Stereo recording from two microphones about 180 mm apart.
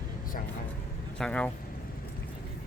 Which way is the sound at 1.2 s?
5° left (ahead or behind).